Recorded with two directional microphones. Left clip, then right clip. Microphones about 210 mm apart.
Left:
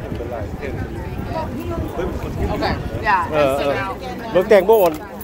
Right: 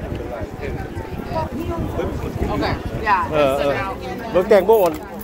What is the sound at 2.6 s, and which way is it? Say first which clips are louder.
Speech: left 2 dB; 40° left (ahead or behind).